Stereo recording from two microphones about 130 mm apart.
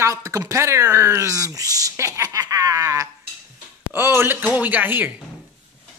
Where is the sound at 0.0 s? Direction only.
25° right (ahead or behind).